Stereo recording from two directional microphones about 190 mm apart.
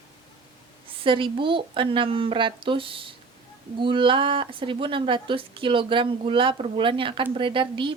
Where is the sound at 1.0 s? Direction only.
25° right (ahead or behind).